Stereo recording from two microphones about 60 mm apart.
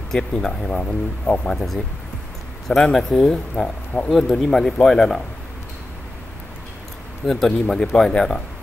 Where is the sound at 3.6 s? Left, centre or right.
Centre.